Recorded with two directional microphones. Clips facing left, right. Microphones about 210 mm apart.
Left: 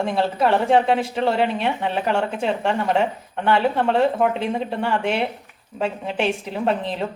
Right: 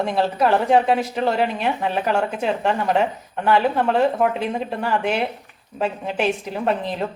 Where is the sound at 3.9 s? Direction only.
30° left (ahead or behind).